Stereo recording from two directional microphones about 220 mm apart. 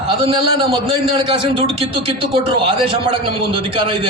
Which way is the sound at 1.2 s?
20° right (ahead or behind).